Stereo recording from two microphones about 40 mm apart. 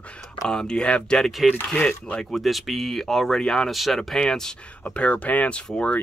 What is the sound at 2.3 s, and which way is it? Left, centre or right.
Speech, centre.